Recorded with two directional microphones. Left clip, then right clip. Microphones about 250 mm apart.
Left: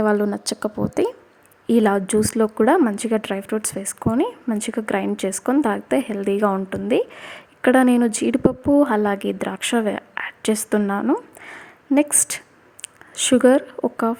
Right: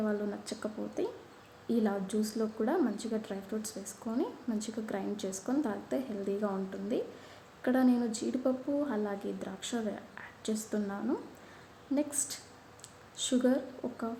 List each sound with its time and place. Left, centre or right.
0.0 s a woman's voice: left